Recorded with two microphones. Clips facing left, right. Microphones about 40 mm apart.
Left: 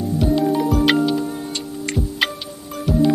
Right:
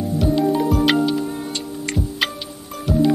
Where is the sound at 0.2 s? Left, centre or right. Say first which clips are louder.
Even; centre.